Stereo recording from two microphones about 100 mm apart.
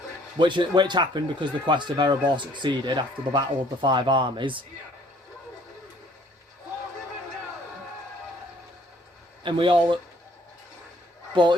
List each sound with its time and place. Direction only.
0.3 s speech: 55° right (ahead or behind)
9.4 s speech: 55° right (ahead or behind)